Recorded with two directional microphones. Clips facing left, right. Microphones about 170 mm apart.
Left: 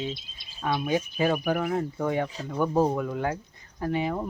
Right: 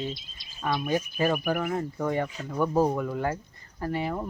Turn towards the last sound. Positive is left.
turn(degrees=5)  # may be behind; listen again after turning